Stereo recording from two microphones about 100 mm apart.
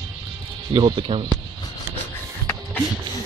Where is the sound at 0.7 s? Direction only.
55° right (ahead or behind).